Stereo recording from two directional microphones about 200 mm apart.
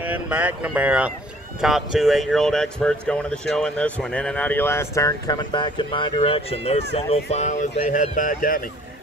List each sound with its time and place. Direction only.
0.0 s speech: 5° right (ahead or behind); by 8.6 s 45° left (ahead or behind)